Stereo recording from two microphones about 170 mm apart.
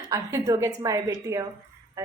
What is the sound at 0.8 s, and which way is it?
Speech, 20° right (ahead or behind).